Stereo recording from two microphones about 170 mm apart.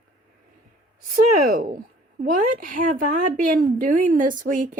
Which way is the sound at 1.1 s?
55° right (ahead or behind).